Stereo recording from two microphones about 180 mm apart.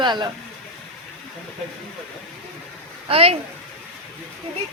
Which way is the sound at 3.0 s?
35° right (ahead or behind).